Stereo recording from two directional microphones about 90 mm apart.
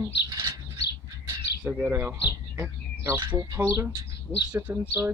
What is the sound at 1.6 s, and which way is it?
Speech, 20° right (ahead or behind).